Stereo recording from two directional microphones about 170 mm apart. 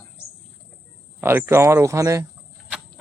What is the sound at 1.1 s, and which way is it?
Speech, 15° right (ahead or behind).